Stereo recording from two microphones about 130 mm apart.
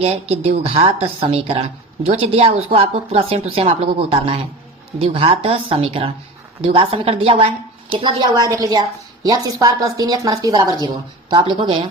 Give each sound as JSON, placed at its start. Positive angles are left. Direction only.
{"t": 0.0, "sound": "a woman's voice", "side_deg": -50}